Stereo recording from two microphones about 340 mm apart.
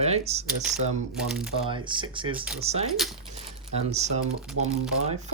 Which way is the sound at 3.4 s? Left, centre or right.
Centre.